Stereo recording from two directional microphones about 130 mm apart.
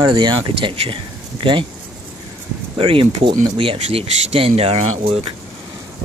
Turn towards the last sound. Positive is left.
turn(degrees=-50)  # may be behind; listen again after turning